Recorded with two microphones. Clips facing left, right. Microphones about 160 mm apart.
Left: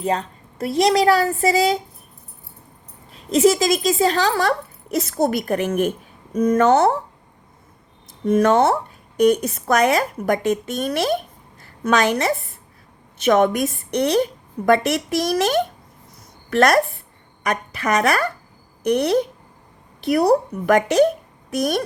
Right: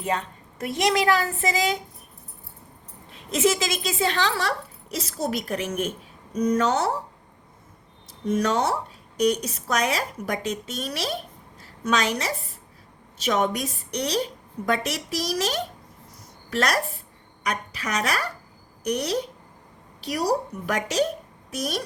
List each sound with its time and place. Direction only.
0.0 s speech: 35° left (ahead or behind)
3.1 s a woman's voice: 35° left (ahead or behind); by 6.9 s 60° left (ahead or behind)
8.2 s a woman's voice: 55° left (ahead or behind)
13.2 s a woman's voice: 70° left (ahead or behind)